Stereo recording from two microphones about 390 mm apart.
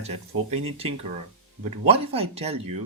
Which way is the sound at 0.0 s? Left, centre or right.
Centre.